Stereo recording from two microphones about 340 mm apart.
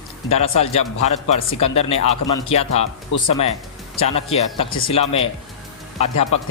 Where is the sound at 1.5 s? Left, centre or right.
Left.